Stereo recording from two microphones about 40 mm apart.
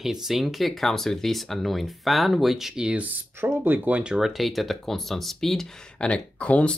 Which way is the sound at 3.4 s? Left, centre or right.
Right.